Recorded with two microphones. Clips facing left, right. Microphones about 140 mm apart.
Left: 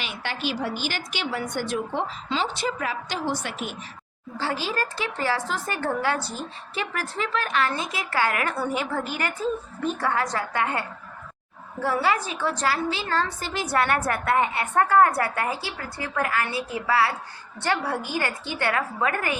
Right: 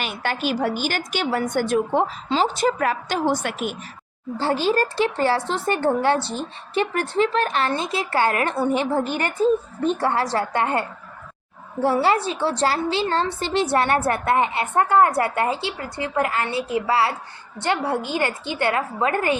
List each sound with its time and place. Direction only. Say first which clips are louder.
0.0 s a woman's voice: right 5 dB; 50° right (ahead or behind)
4.7 s a woman's voice: right 8 dB; 30° right (ahead or behind)